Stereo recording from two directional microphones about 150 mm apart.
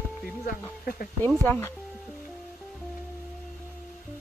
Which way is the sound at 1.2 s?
10° left (ahead or behind).